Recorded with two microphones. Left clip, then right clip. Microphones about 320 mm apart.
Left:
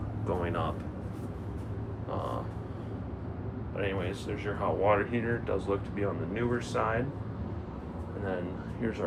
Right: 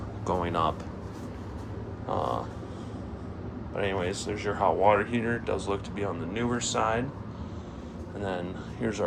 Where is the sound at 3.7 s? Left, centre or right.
Centre.